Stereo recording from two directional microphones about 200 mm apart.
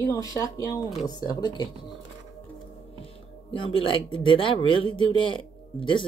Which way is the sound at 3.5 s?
25° left (ahead or behind).